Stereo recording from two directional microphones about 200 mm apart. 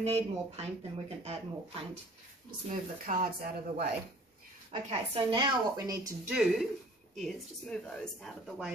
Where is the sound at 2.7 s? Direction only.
40° right (ahead or behind).